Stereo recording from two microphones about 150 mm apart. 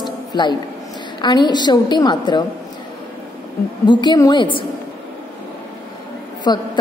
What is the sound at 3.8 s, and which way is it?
Speech, 25° left (ahead or behind).